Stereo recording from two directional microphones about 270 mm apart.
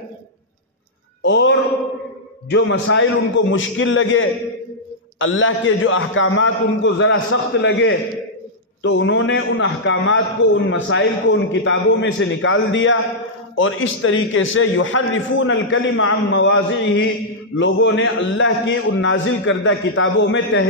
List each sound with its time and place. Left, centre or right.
1.2 s speech: left
2.5 s a man's voice: left